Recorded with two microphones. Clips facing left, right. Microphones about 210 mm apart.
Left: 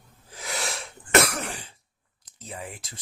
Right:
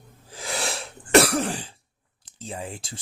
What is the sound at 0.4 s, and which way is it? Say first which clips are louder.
Cough: right 3 dB; 30° right (ahead or behind).